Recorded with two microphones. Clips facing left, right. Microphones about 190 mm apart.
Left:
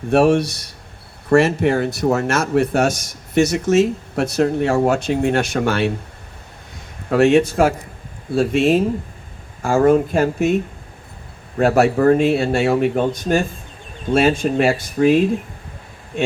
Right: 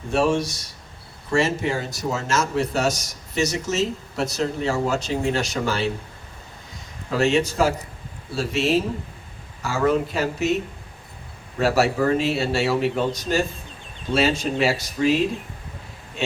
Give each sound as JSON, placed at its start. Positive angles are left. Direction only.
{"t": 0.1, "sound": "a man's voice", "side_deg": 60}
{"t": 7.1, "sound": "a man's voice", "side_deg": 55}
{"t": 11.5, "sound": "speech", "side_deg": 55}